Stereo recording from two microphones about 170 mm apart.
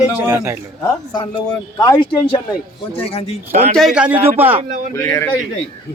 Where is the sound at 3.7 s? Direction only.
5° right (ahead or behind).